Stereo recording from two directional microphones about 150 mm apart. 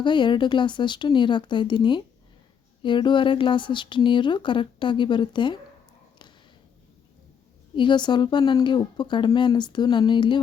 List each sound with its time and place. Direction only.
0.0 s speech: 30° left (ahead or behind)
7.8 s speech: 30° left (ahead or behind)